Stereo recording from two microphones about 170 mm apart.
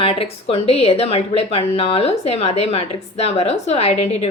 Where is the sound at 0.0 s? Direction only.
35° left (ahead or behind).